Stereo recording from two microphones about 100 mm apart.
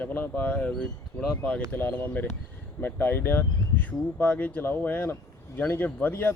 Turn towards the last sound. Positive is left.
turn(degrees=20)  # may be behind; listen again after turning